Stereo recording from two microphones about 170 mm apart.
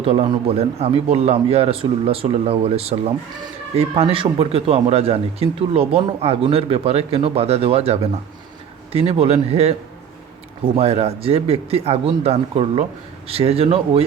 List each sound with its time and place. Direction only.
0.0 s speech: 35° right (ahead or behind)
10.8 s speech: 40° right (ahead or behind)